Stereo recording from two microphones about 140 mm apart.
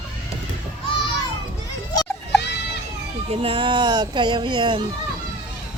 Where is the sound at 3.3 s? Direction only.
40° right (ahead or behind).